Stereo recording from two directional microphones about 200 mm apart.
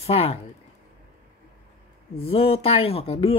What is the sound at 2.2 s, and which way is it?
Speech, 30° left (ahead or behind).